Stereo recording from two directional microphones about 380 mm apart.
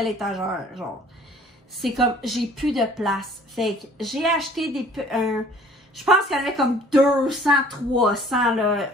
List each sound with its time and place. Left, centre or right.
0.0 s a woman's voice: centre